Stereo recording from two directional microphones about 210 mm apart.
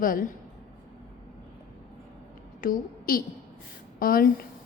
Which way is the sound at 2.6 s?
40° left (ahead or behind).